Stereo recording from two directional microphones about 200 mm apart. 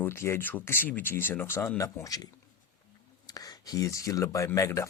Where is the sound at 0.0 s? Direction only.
10° left (ahead or behind).